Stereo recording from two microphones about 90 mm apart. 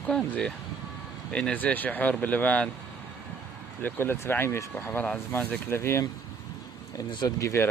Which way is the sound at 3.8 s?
25° left (ahead or behind).